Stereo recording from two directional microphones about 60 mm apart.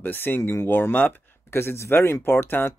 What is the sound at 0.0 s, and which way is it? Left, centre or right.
Speech, left.